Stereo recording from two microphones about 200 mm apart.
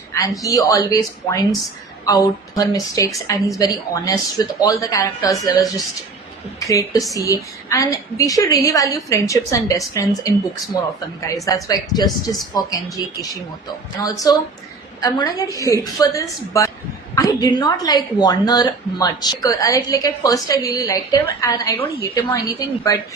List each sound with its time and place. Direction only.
0.1 s a woman's voice: 15° left (ahead or behind)
11.4 s speech: 20° left (ahead or behind)
14.0 s a woman's voice: 20° left (ahead or behind)